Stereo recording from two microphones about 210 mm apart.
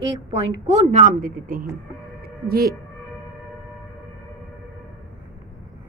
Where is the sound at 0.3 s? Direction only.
30° right (ahead or behind).